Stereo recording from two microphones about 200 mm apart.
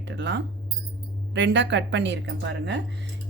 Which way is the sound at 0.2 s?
60° right (ahead or behind).